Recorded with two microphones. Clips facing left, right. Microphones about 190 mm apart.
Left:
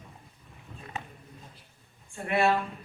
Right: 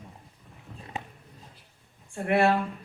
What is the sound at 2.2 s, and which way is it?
Speech, 75° right (ahead or behind).